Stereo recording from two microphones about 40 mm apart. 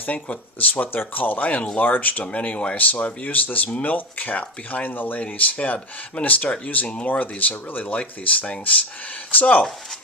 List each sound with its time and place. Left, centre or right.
0.6 s speech: left
5.2 s speech: left